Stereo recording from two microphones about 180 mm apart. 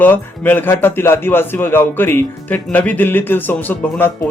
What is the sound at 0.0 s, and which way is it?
Speech, 10° left (ahead or behind).